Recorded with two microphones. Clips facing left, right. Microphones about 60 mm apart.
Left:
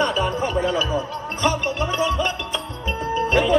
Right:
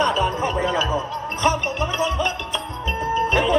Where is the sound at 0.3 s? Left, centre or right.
Right.